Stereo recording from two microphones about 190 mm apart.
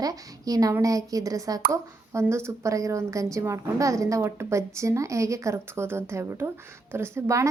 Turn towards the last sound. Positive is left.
turn(degrees=-15)  # may be behind; listen again after turning